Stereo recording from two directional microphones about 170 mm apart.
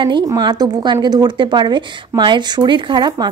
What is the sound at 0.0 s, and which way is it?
A woman's voice, 25° right (ahead or behind).